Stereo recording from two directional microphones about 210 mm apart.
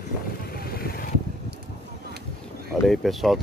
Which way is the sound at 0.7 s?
45° left (ahead or behind).